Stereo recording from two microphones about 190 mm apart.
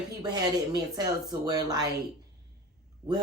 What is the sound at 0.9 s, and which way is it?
Speech, 20° right (ahead or behind).